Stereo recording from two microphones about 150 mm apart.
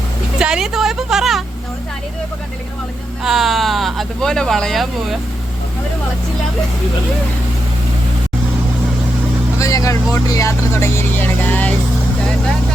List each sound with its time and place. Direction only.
0.3 s a sound: 5° right (ahead or behind)
3.2 s speech: centre (ahead or behind)
9.6 s speech: 20° left (ahead or behind)